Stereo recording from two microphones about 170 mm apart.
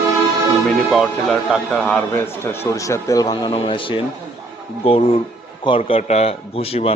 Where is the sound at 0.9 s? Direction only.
Centre (ahead or behind).